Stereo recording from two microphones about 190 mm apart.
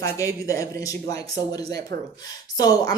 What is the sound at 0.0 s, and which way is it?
A woman's voice, 15° left (ahead or behind).